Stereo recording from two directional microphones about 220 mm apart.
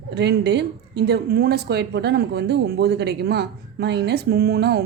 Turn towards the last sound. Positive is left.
turn(degrees=-45)  # may be behind; listen again after turning